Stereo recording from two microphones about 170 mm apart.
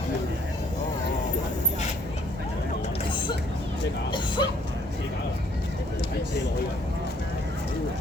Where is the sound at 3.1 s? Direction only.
30° left (ahead or behind).